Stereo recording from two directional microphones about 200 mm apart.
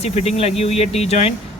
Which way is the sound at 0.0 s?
30° left (ahead or behind).